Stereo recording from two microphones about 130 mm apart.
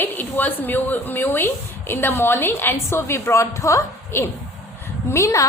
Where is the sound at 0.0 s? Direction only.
15° left (ahead or behind).